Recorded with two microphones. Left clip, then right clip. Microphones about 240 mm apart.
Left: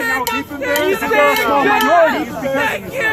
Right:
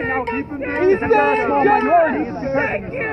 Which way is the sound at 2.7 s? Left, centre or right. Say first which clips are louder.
Left 4 dB; left.